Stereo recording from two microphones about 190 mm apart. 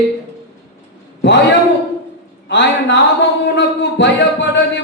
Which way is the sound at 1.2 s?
70° left (ahead or behind).